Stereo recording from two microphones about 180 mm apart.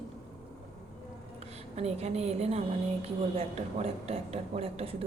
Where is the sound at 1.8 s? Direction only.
35° right (ahead or behind).